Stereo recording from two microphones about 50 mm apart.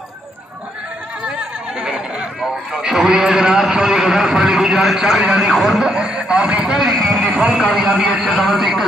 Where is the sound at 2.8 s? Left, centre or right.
Centre.